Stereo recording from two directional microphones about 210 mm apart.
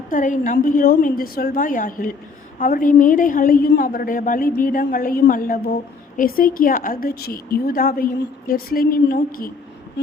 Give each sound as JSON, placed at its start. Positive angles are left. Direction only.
{"t": 0.1, "sound": "a woman's voice", "side_deg": 40}